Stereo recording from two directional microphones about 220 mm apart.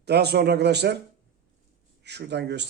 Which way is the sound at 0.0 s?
50° right (ahead or behind).